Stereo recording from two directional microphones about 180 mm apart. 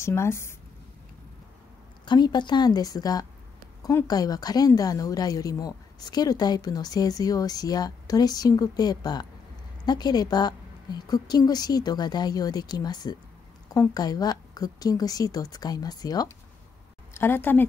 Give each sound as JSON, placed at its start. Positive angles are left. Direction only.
{"t": 0.0, "sound": "a woman's voice", "side_deg": 15}
{"t": 2.0, "sound": "a woman's voice", "side_deg": 25}